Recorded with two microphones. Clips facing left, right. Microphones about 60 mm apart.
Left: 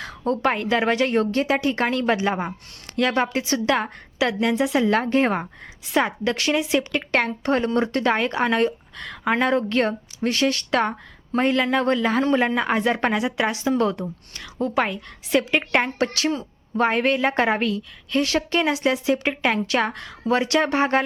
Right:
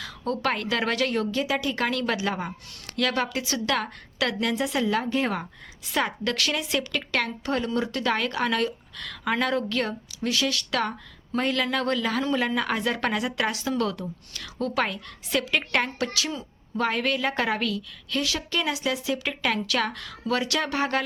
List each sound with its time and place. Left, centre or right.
0.0 s speech: left
4.9 s a woman's voice: left
5.9 s a woman's voice: left
16.0 s a woman's voice: left